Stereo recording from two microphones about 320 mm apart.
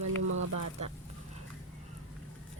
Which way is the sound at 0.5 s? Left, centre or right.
Right.